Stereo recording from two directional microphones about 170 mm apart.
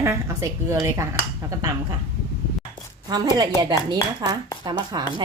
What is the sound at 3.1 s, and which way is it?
Speech, 25° right (ahead or behind).